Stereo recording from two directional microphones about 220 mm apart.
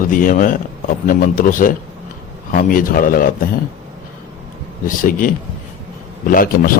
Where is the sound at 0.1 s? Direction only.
40° left (ahead or behind).